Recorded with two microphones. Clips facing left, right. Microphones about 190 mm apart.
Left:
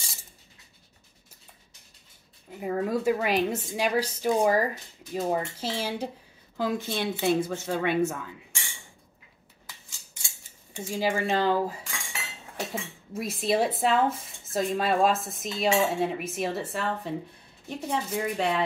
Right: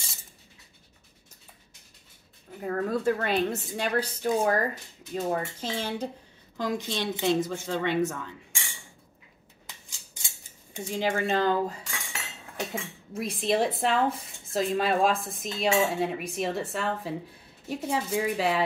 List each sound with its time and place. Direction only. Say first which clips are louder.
2.6 s a woman's voice: left 1 dB; 10° left (ahead or behind)
9.7 s scissors: even; 20° right (ahead or behind)
10.9 s speech: even; 5° left (ahead or behind)
12.7 s speech: even; 5° left (ahead or behind)